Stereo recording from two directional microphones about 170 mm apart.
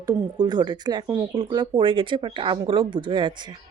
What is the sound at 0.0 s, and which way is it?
Speech, 25° right (ahead or behind).